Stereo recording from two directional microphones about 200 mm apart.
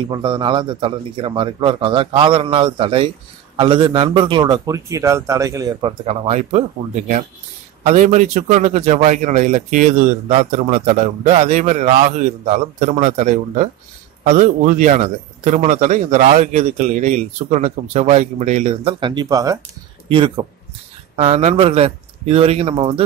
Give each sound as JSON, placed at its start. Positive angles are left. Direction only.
{"t": 0.1, "sound": "a man's voice", "side_deg": -20}
{"t": 7.8, "sound": "a man's voice", "side_deg": -35}